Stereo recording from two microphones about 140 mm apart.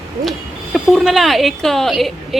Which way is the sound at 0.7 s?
Centre (ahead or behind).